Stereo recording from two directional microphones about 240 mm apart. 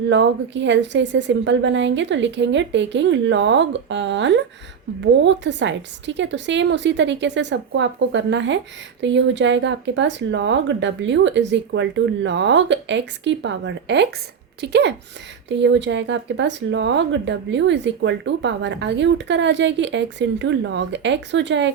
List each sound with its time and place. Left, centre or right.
0.1 s speech: right